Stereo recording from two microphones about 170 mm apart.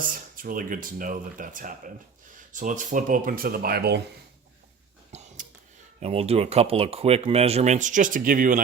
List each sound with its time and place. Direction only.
0.0 s speech: 55° right (ahead or behind); by 4.0 s 70° right (ahead or behind)
5.1 s a sound: 40° right (ahead or behind)
6.0 s speech: 35° right (ahead or behind); by 8.6 s 50° right (ahead or behind)